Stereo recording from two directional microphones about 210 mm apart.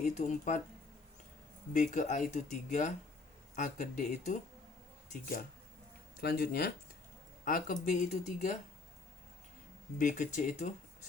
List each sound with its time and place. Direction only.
0.0 s speech: 35° left (ahead or behind)
1.7 s speech: 35° left (ahead or behind)
6.1 s speech: 45° left (ahead or behind)
10.0 s speech: 35° left (ahead or behind)